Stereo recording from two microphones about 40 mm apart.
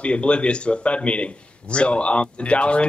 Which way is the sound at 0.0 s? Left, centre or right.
Left.